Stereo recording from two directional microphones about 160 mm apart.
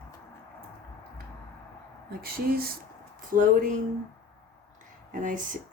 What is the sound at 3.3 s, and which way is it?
Speech, 55° right (ahead or behind).